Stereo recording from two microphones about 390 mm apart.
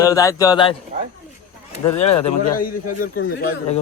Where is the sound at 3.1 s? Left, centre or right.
Left.